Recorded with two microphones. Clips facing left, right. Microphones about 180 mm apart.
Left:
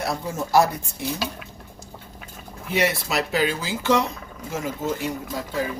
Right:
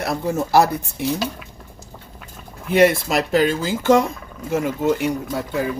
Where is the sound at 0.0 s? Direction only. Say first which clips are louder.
Right 5 dB; 65° right (ahead or behind).